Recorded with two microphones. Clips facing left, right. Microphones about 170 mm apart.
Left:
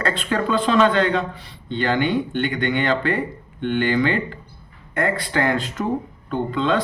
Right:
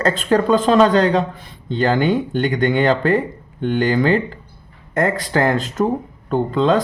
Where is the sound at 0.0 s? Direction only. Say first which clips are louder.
Right 6 dB; 45° right (ahead or behind).